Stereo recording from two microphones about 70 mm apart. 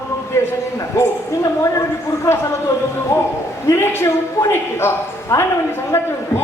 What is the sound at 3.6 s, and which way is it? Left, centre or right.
A woman's voice, left.